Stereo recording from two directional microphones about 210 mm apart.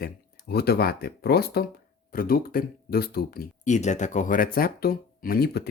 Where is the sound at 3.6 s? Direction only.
35° left (ahead or behind).